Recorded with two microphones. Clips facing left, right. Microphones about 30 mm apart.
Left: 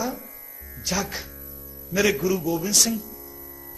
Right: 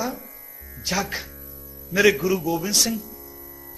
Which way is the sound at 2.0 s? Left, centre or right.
Centre.